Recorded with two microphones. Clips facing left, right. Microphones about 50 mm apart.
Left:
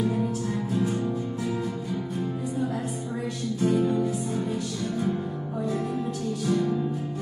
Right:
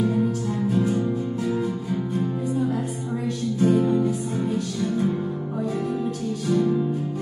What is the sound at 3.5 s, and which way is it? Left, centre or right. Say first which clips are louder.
Music: right 4 dB; right.